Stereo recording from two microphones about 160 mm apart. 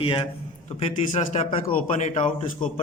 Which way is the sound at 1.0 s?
45° left (ahead or behind).